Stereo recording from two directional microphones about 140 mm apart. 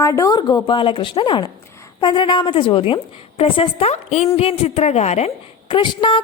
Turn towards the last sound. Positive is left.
turn(degrees=35)  # may be behind; listen again after turning